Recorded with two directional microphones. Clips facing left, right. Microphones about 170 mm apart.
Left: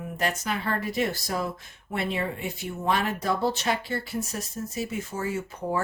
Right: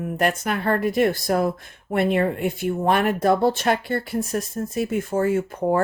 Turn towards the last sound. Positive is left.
turn(degrees=-55)  # may be behind; listen again after turning